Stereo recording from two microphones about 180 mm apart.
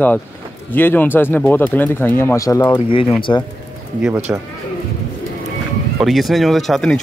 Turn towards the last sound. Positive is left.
turn(degrees=0)  # may be behind; listen again after turning